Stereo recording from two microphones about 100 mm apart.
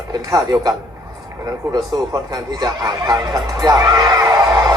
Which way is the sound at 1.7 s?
40° right (ahead or behind).